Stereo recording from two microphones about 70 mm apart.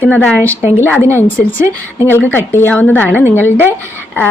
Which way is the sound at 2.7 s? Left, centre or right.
Left.